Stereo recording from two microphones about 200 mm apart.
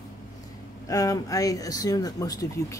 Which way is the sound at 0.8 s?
15° left (ahead or behind).